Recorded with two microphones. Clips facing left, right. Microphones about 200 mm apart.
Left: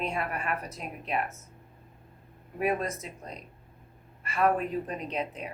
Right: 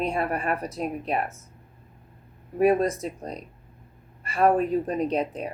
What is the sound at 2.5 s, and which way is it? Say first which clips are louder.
Speech: right 9 dB; 35° right (ahead or behind).